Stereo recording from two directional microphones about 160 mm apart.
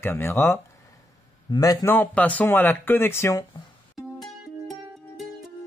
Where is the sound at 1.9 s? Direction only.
10° left (ahead or behind).